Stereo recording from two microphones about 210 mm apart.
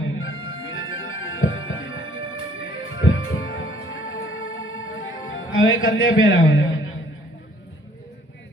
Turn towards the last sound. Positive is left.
turn(degrees=70)  # may be behind; listen again after turning